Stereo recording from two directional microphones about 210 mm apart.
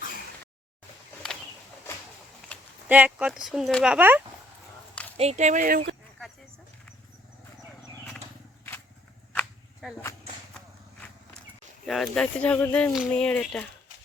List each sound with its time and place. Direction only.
2.5 s a sound: 5° left (ahead or behind)
2.9 s speech: 5° right (ahead or behind)
3.9 s speech: 10° right (ahead or behind)
5.1 s speech: 30° right (ahead or behind)
9.3 s cap gun: 5° left (ahead or behind)
11.9 s speech: centre (ahead or behind)